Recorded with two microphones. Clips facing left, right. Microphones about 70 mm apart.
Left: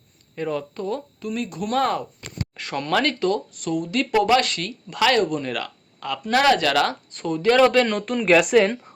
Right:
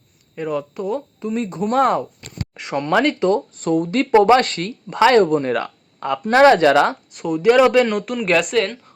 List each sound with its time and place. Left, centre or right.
0.3 s speech: centre
1.2 s speech: right
7.1 s speech: centre